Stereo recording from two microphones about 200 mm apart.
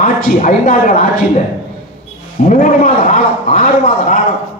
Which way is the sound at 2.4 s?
40° left (ahead or behind).